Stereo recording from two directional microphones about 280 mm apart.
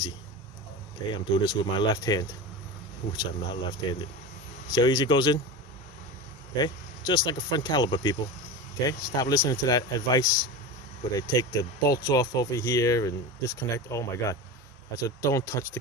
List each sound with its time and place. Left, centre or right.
1.1 s speech: centre
6.6 s speech: centre